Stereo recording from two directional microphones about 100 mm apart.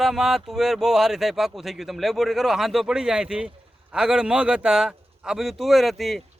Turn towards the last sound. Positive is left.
turn(degrees=0)  # may be behind; listen again after turning